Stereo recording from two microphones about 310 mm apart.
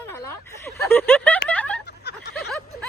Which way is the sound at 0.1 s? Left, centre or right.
Centre.